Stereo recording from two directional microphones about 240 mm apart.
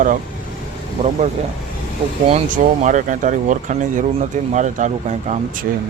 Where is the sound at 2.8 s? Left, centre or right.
Right.